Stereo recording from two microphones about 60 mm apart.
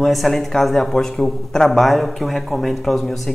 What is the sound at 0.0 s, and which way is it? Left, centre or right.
A man's voice, centre.